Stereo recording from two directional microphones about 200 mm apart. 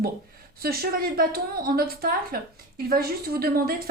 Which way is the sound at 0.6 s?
50° right (ahead or behind).